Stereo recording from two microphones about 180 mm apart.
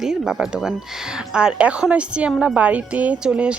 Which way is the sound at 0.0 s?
5° right (ahead or behind).